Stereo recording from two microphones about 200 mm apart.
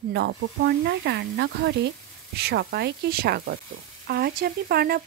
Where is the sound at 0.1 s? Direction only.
55° right (ahead or behind).